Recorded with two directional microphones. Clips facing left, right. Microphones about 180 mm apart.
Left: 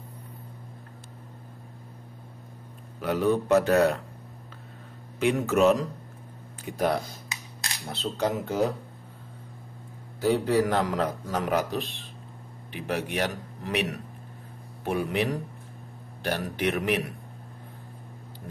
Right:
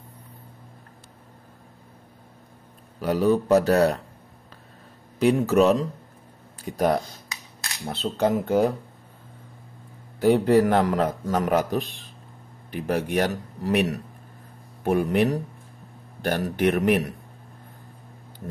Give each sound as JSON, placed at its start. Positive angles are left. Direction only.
{"t": 3.0, "sound": "a man's voice", "side_deg": -40}
{"t": 5.2, "sound": "a man's voice", "side_deg": -35}
{"t": 7.8, "sound": "a man's voice", "side_deg": -55}
{"t": 10.2, "sound": "a man's voice", "side_deg": -55}